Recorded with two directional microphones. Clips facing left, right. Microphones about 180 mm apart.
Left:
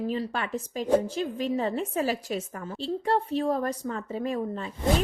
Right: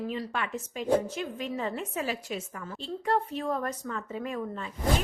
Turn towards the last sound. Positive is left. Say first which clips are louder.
# left 3 dB
turn(degrees=35)  # may be behind; listen again after turning